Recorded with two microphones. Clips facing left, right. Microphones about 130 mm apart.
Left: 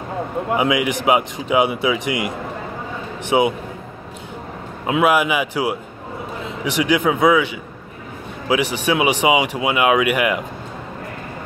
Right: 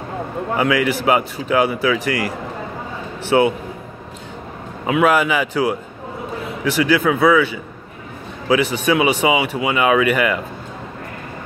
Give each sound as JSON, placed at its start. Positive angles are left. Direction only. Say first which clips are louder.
{"t": 0.6, "sound": "speech", "louder": "right 2 dB", "side_deg": 15}
{"t": 4.9, "sound": "speech", "louder": "right 1 dB", "side_deg": 10}